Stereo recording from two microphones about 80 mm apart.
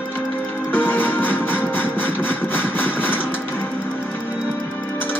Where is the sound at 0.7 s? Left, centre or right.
Left.